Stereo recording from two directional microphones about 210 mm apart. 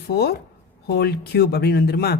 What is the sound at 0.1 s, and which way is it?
Speech, 50° left (ahead or behind).